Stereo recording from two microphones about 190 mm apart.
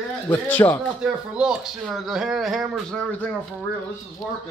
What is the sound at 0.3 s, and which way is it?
Speech, 10° left (ahead or behind).